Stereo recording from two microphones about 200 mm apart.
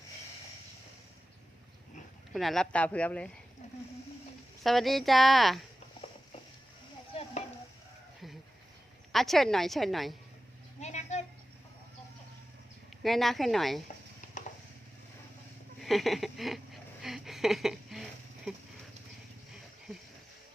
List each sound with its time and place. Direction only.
2.3 s speech: centre (ahead or behind)
4.6 s speech: centre (ahead or behind)
9.1 s speech: centre (ahead or behind)
10.8 s a sound: 35° left (ahead or behind)
13.0 s speech: centre (ahead or behind)
15.8 s a sound: centre (ahead or behind)